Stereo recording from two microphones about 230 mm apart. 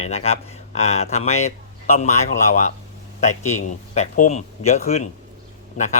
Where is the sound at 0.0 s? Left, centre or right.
Left.